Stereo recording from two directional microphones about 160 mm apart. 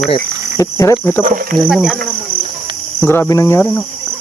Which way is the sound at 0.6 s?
20° left (ahead or behind).